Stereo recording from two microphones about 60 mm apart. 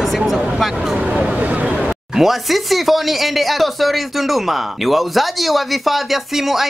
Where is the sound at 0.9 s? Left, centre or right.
Centre.